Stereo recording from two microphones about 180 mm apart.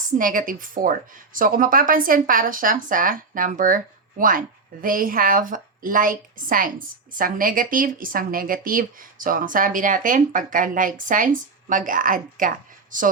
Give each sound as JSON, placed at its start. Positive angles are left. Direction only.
{"t": 0.2, "sound": "speech", "side_deg": -50}